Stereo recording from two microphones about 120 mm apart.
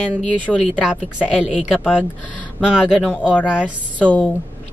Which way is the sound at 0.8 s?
5° right (ahead or behind).